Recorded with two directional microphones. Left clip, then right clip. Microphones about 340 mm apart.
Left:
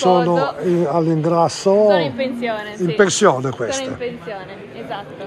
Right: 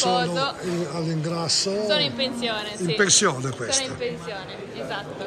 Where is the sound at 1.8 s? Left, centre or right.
Centre.